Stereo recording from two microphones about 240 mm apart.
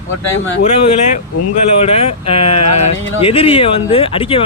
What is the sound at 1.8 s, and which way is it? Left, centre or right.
Speech, left.